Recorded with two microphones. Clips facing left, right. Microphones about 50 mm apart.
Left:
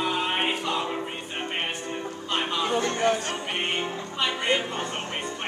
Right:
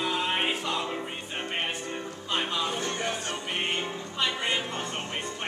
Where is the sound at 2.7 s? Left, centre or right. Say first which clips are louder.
Left 7 dB; left.